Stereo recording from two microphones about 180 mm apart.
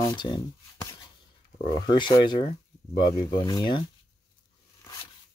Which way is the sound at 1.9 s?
25° left (ahead or behind).